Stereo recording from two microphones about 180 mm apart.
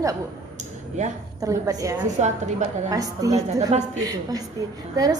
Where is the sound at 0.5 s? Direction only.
40° right (ahead or behind).